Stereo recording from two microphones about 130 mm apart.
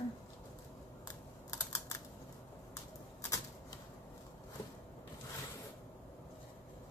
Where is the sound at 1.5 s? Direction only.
25° left (ahead or behind).